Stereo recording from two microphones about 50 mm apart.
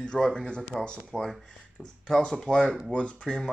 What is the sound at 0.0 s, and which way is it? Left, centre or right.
Speech, centre.